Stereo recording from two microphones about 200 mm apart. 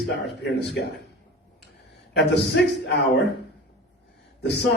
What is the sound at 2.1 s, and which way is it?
Speech, 60° left (ahead or behind).